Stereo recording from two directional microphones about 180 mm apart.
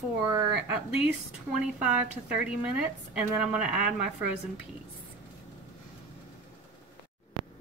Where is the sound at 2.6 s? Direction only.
5° right (ahead or behind).